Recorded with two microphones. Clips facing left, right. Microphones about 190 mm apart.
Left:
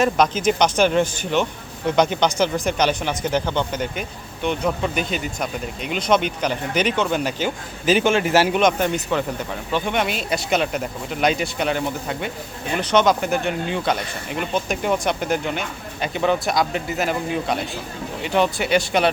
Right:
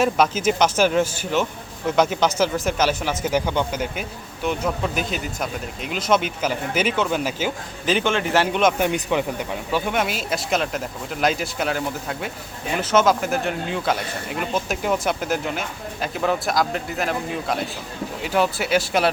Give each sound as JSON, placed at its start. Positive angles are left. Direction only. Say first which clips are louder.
{"t": 0.0, "sound": "speech", "louder": "left 1 dB", "side_deg": -5}
{"t": 7.9, "sound": "a man's voice", "louder": "left 4 dB", "side_deg": 10}
{"t": 8.8, "sound": "speech", "louder": "even", "side_deg": -10}